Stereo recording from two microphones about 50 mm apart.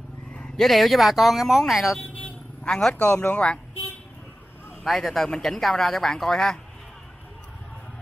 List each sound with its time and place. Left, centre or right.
0.6 s speech: centre
2.1 s vehicle: centre
2.9 s speech: left
4.8 s speech: centre